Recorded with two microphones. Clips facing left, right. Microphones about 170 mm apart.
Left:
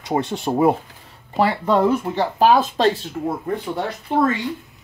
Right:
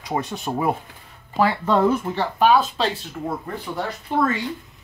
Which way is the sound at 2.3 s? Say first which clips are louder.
Left 2 dB; 40° left (ahead or behind).